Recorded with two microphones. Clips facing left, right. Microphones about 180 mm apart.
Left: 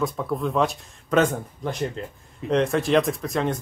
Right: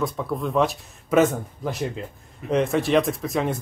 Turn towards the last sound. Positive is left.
turn(degrees=-5)  # may be behind; listen again after turning